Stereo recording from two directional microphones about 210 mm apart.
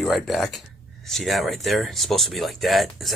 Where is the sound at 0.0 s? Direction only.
Centre (ahead or behind).